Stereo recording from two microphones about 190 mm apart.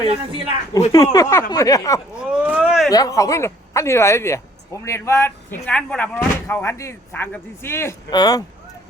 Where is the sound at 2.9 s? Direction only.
20° left (ahead or behind).